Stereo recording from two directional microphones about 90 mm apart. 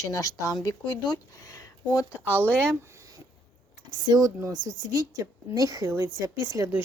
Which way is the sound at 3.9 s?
50° right (ahead or behind).